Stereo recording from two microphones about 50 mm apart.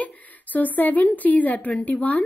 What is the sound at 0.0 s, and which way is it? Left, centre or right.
A woman's voice, left.